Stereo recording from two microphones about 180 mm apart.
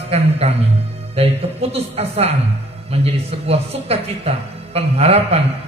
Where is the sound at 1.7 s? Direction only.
35° right (ahead or behind).